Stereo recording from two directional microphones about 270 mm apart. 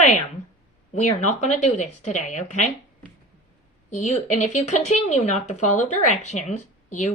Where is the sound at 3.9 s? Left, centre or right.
Left.